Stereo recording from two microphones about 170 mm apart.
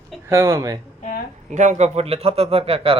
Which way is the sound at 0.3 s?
15° right (ahead or behind).